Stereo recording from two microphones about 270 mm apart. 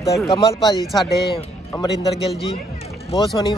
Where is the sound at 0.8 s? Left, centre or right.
Centre.